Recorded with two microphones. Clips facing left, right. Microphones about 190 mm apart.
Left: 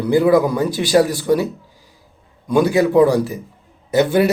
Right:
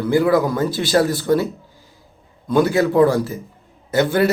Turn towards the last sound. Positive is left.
turn(degrees=15)  # may be behind; listen again after turning